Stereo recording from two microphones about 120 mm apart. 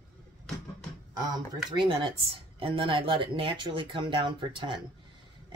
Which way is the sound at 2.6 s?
50° right (ahead or behind).